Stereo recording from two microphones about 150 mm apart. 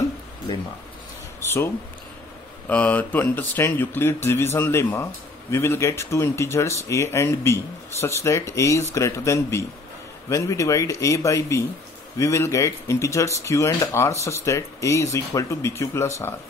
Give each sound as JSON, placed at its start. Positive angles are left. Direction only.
{"t": 2.7, "sound": "speech", "side_deg": 10}